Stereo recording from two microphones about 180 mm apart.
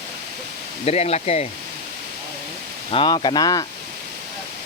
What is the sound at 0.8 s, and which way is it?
Speech, 35° left (ahead or behind).